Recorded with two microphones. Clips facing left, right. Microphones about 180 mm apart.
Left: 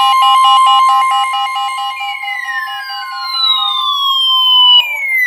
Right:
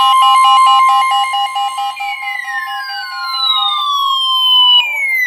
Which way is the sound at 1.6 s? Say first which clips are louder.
Right 2 dB; 65° right (ahead or behind).